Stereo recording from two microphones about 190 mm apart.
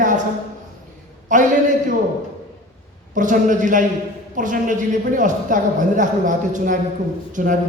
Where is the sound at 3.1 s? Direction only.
45° right (ahead or behind).